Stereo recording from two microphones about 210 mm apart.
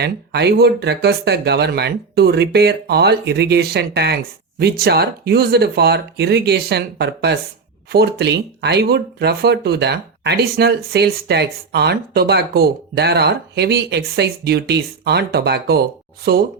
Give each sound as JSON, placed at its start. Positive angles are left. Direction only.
{"t": 0.0, "sound": "speech", "side_deg": -50}